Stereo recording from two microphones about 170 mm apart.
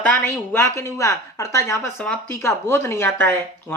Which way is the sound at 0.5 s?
15° left (ahead or behind).